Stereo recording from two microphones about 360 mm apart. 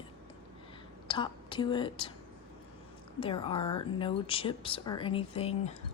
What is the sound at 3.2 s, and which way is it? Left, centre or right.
Speech, centre.